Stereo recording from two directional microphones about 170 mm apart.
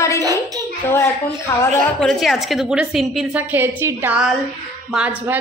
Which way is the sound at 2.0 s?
Centre (ahead or behind).